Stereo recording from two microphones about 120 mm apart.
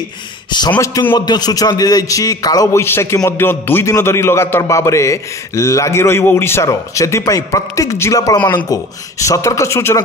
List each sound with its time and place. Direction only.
0.5 s a man's voice: 40° left (ahead or behind)
0.7 s a man's voice: 25° left (ahead or behind)
1.1 s a man's voice: 35° left (ahead or behind)